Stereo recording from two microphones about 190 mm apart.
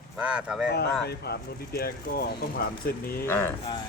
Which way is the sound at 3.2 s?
10° left (ahead or behind).